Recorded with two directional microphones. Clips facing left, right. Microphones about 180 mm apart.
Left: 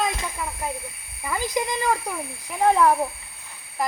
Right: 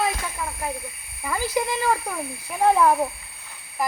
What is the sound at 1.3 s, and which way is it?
Speech, 15° left (ahead or behind).